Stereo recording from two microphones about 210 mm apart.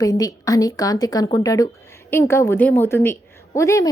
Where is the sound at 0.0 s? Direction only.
15° left (ahead or behind).